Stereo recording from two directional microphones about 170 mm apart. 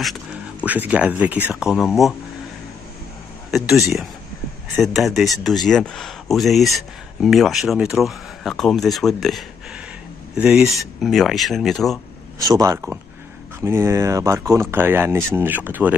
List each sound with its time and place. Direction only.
0.0 s speech: 5° right (ahead or behind)
3.5 s speech: centre (ahead or behind)
4.8 s speech: centre (ahead or behind)
12.4 s speech: 20° right (ahead or behind)